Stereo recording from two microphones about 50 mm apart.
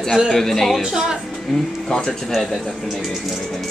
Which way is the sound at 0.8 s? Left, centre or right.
Centre.